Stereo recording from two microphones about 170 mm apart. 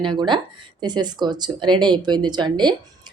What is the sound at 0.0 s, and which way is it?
Speech, 30° right (ahead or behind).